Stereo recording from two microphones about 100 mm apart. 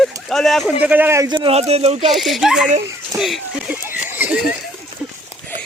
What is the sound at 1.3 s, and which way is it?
Speech, 60° right (ahead or behind).